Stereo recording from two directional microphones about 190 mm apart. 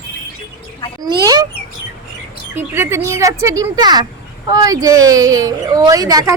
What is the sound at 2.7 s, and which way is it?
Speech, 15° right (ahead or behind).